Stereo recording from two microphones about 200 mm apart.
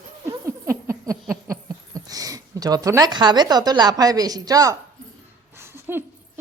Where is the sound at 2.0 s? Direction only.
20° right (ahead or behind).